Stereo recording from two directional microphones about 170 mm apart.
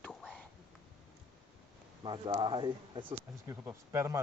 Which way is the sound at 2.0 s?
30° right (ahead or behind).